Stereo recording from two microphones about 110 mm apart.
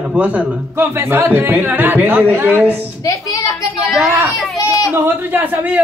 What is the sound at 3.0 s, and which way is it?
Speech, 30° left (ahead or behind).